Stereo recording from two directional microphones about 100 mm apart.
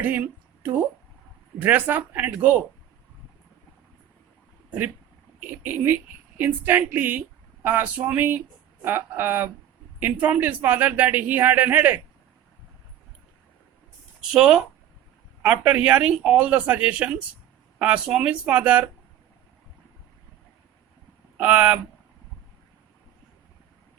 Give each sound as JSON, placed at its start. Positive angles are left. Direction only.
{"t": 0.0, "sound": "a woman's voice", "side_deg": -15}
{"t": 5.4, "sound": "speech", "side_deg": -15}
{"t": 14.2, "sound": "speech", "side_deg": -5}
{"t": 21.3, "sound": "speech", "side_deg": -15}